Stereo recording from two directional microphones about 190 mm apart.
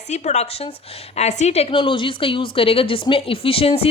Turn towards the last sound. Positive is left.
turn(degrees=30)  # may be behind; listen again after turning